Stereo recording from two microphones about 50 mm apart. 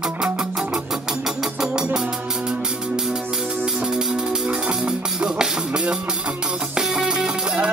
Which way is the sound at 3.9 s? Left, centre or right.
Centre.